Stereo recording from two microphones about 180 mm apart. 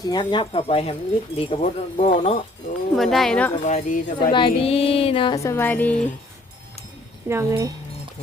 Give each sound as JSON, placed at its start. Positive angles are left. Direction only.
{"t": 0.0, "sound": "speech", "side_deg": 25}
{"t": 1.4, "sound": "child singing", "side_deg": 35}
{"t": 2.9, "sound": "speech", "side_deg": 0}
{"t": 3.6, "sound": "speech", "side_deg": 45}
{"t": 4.3, "sound": "child singing", "side_deg": 25}
{"t": 5.4, "sound": "music", "side_deg": 15}
{"t": 7.3, "sound": "speech", "side_deg": -15}